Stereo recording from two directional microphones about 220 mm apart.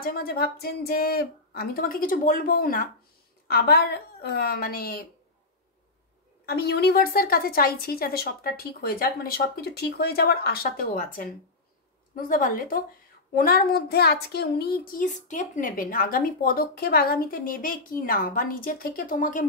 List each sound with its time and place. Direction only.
0.0 s a woman's voice: 45° left (ahead or behind)
6.4 s a woman's voice: 45° left (ahead or behind)